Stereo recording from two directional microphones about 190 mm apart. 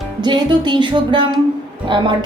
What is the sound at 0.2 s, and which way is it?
Speech, 25° right (ahead or behind).